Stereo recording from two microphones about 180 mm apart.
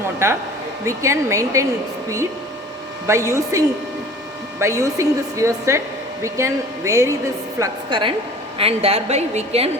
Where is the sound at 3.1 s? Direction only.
15° right (ahead or behind).